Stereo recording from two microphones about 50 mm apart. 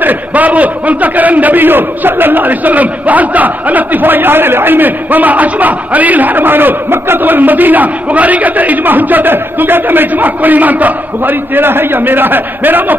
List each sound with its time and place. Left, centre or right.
0.0 s a man's voice: right